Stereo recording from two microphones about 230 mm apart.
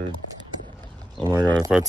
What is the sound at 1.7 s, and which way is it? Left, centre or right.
Speech, centre.